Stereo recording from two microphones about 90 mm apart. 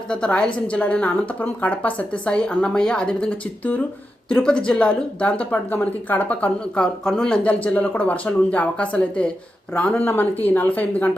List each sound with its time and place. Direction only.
0.1 s speech: 10° left (ahead or behind)